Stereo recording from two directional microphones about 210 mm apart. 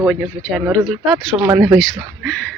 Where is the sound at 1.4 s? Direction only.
15° right (ahead or behind).